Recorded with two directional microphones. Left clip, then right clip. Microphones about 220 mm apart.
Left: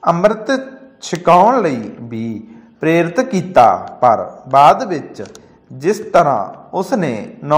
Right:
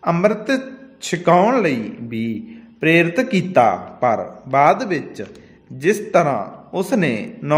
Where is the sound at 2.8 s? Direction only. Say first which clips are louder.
Left 1 dB; 5° right (ahead or behind).